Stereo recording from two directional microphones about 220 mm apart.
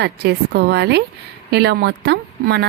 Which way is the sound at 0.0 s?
50° right (ahead or behind).